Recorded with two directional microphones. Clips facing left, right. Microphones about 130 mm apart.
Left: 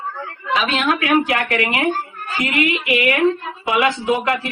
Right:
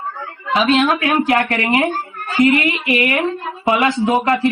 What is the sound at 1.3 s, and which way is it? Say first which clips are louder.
A woman's voice: right 4 dB; 35° right (ahead or behind).